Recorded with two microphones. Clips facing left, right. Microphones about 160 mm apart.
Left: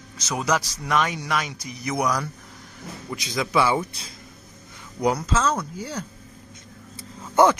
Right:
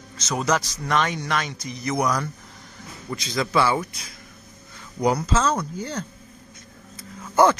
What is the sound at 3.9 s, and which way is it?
Speech, 30° left (ahead or behind).